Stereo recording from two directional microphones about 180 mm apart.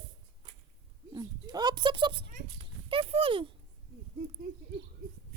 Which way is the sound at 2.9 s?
30° right (ahead or behind).